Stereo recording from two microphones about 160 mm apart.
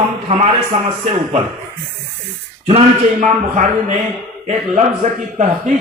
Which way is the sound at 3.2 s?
50° right (ahead or behind).